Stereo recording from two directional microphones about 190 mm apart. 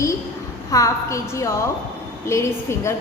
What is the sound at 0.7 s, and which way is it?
A woman's voice, 15° left (ahead or behind).